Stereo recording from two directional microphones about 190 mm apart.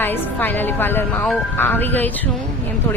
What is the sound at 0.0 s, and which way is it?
Speech, 10° left (ahead or behind).